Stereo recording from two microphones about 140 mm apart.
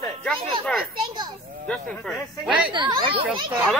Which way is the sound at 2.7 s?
30° right (ahead or behind).